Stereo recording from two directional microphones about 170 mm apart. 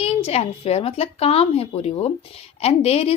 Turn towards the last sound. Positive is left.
turn(degrees=35)  # may be behind; listen again after turning